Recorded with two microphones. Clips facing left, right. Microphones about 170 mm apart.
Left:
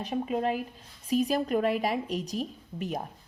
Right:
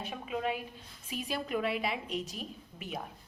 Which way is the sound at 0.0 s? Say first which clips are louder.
Left 7 dB; 40° left (ahead or behind).